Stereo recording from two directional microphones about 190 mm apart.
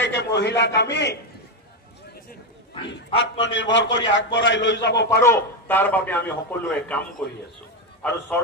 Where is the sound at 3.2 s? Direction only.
70° left (ahead or behind).